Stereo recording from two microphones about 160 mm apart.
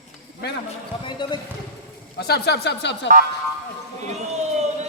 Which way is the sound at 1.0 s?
30° left (ahead or behind).